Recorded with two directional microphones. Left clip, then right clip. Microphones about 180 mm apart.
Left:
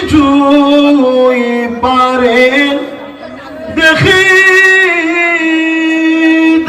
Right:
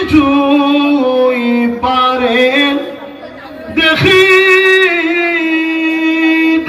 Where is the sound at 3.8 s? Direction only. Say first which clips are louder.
Left 1 dB; 15° left (ahead or behind).